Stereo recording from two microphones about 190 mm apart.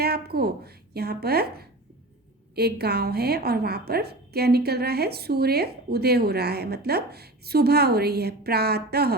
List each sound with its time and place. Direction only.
0.0 s a woman's voice: 55° right (ahead or behind)